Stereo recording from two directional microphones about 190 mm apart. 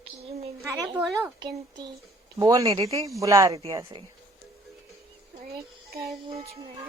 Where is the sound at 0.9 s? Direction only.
5° right (ahead or behind).